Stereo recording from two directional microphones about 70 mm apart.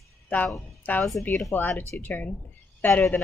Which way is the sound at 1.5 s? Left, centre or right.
Left.